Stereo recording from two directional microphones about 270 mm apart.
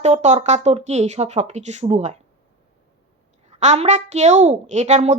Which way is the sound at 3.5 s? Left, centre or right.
Right.